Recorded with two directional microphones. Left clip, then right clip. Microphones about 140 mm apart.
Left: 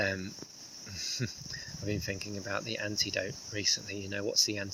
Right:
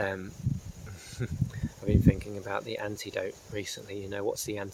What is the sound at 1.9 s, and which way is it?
Speech, 20° right (ahead or behind).